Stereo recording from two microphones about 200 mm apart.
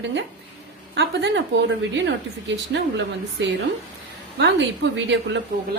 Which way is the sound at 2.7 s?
65° right (ahead or behind).